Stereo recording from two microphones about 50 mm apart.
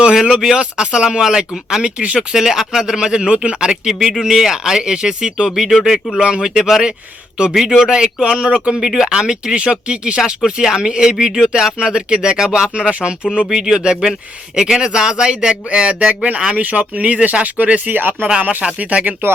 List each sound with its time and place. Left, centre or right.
0.0 s speech: centre
1.8 s speech: right
2.3 s speech: centre; by 19.1 s right